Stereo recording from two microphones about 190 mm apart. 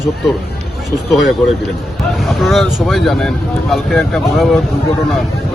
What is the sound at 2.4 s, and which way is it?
Speech, centre (ahead or behind).